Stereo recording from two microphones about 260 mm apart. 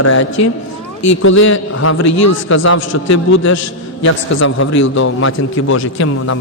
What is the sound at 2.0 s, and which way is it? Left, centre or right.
Speech, left.